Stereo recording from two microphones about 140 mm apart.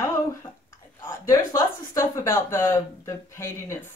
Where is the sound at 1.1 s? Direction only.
25° left (ahead or behind).